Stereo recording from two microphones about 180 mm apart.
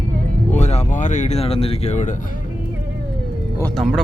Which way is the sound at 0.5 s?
40° left (ahead or behind).